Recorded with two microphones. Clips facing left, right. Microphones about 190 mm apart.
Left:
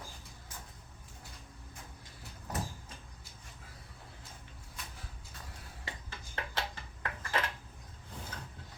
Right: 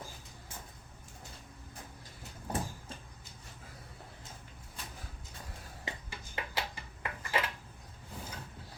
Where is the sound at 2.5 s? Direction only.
30° right (ahead or behind).